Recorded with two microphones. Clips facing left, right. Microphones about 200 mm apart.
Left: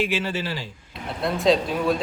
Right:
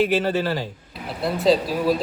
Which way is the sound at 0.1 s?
50° right (ahead or behind).